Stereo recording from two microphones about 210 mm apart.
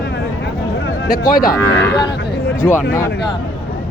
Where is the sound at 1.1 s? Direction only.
40° left (ahead or behind).